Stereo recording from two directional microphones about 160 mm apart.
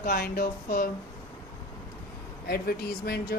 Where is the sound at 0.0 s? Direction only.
70° left (ahead or behind).